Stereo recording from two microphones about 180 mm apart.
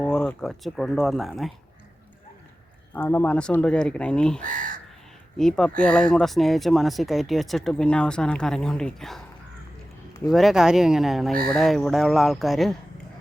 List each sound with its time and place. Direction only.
0.0 s speech: 5° left (ahead or behind)
2.9 s speech: 10° left (ahead or behind)
4.4 s crow: 50° right (ahead or behind)
5.4 s speech: 5° left (ahead or behind)
10.2 s speech: centre (ahead or behind)